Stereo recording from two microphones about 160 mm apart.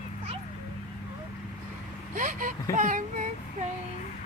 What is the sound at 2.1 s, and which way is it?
Speech, 50° right (ahead or behind).